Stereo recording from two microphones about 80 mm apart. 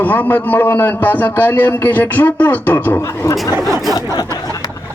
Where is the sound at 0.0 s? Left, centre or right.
Left.